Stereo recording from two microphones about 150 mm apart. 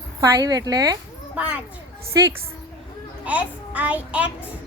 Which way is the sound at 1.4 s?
10° right (ahead or behind).